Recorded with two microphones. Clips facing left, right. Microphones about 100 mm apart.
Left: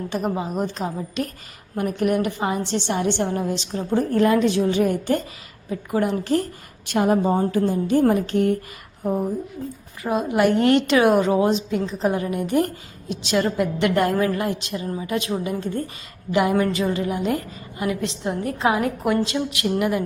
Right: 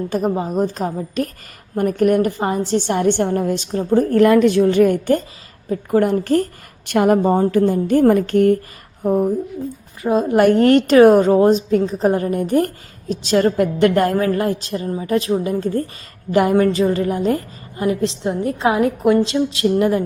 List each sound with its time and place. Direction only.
0.3 s a woman's voice: 35° right (ahead or behind)
3.9 s speech: 60° right (ahead or behind)
5.6 s a woman's voice: 45° right (ahead or behind)
10.0 s a woman's voice: 25° right (ahead or behind)
10.2 s a woman's voice: 45° right (ahead or behind)